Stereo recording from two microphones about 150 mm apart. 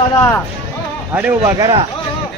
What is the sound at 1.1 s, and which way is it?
Speech, 10° right (ahead or behind).